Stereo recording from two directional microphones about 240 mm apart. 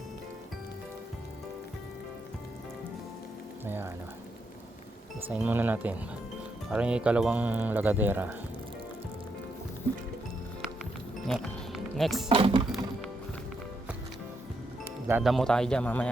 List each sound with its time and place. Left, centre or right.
5.3 s speech: centre
11.3 s music: centre
12.3 s speech: right
15.0 s speech: centre